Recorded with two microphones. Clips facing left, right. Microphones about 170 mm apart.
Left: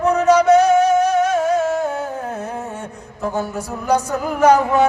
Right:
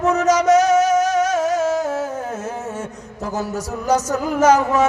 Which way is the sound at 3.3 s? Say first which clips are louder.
Right 3 dB; 40° right (ahead or behind).